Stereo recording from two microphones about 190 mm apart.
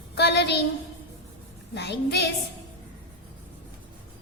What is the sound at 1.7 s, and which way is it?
Speech, 60° left (ahead or behind).